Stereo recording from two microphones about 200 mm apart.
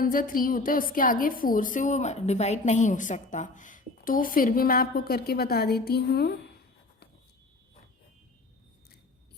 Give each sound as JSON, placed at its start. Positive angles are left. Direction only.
{"t": 0.0, "sound": "a woman's voice", "side_deg": 45}